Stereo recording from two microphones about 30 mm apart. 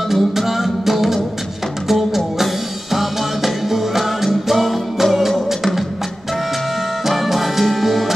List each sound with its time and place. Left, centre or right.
0.1 s music: centre
7.1 s music: centre